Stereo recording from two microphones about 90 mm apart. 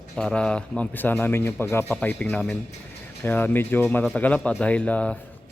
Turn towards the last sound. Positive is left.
turn(degrees=15)  # may be behind; listen again after turning